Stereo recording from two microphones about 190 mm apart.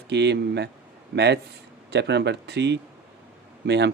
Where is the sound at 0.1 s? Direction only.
65° right (ahead or behind).